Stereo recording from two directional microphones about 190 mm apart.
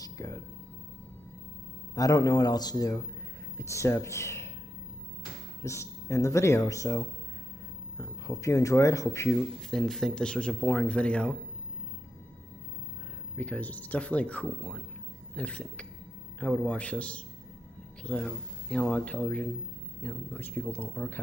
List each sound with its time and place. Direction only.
0.0 s a sound: 15° left (ahead or behind)
2.0 s speech: 20° left (ahead or behind)
5.6 s speech: 15° left (ahead or behind)
9.6 s speech: centre (ahead or behind)
13.3 s speech: 5° left (ahead or behind)